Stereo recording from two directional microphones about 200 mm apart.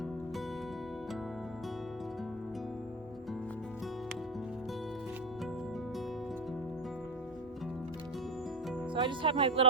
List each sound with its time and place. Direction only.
9.0 s speech: 25° right (ahead or behind)